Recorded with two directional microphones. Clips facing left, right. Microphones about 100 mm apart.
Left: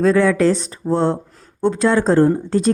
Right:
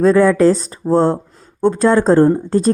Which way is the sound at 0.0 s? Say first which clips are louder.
Right 3 dB; 40° right (ahead or behind).